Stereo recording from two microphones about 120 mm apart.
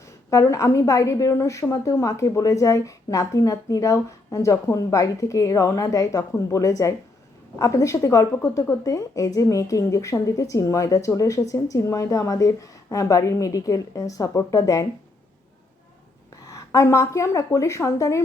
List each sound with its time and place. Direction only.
0.0 s a woman's voice: 25° left (ahead or behind)
16.5 s a woman's voice: 25° left (ahead or behind)